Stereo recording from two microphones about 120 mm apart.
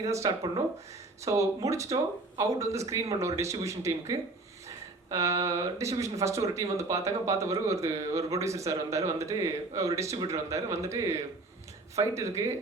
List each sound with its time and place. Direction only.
0.0 s speech: 30° right (ahead or behind)